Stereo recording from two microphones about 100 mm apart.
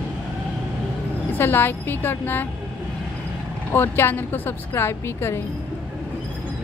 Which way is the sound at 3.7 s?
20° left (ahead or behind).